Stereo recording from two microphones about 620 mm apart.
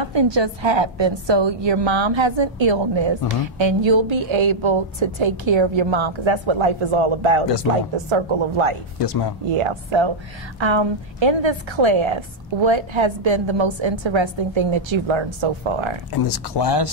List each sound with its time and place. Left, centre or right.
0.0 s a woman's voice: right
9.0 s speech: left
9.5 s a woman's voice: right
16.1 s speech: left